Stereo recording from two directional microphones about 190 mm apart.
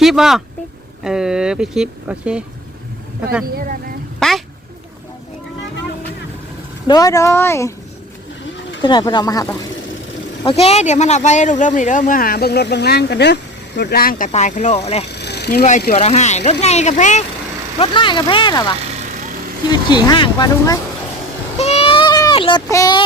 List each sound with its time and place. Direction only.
0.0 s speech: centre (ahead or behind)
3.4 s speech: 50° right (ahead or behind)
4.2 s a sound: centre (ahead or behind)
6.8 s speech: 20° left (ahead or behind)
8.8 s speech: 25° left (ahead or behind)
10.4 s speech: 30° left (ahead or behind)
15.1 s a sound: 60° left (ahead or behind)
15.9 s speech: 35° left (ahead or behind)
17.7 s speech: 25° left (ahead or behind)
19.7 s speech: 25° left (ahead or behind)
21.6 s child singing: 35° left (ahead or behind)